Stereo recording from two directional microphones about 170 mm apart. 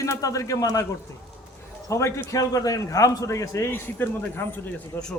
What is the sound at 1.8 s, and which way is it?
A man's voice, 15° left (ahead or behind).